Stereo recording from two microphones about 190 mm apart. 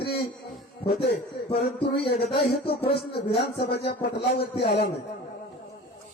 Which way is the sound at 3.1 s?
60° left (ahead or behind).